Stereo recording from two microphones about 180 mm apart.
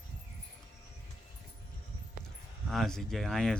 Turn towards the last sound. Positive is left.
turn(degrees=0)  # may be behind; listen again after turning